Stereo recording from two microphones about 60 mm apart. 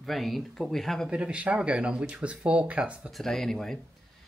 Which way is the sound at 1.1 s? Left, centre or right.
Right.